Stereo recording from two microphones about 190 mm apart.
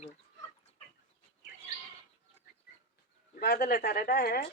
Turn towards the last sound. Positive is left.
turn(degrees=50)  # may be behind; listen again after turning